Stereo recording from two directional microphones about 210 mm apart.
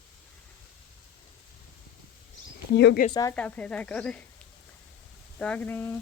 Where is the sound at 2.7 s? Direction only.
55° left (ahead or behind).